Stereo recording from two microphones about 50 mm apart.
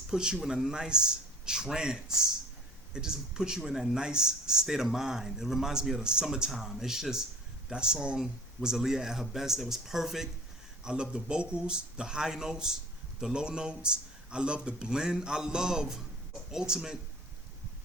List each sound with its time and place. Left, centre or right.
0.1 s speech: centre
10.8 s speech: centre